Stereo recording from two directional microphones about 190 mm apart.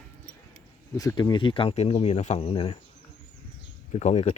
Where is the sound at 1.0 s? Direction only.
20° left (ahead or behind).